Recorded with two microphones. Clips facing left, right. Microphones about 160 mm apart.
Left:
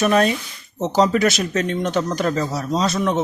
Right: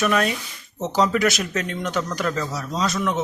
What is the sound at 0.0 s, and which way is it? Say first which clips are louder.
Speech: left 4 dB; 30° left (ahead or behind).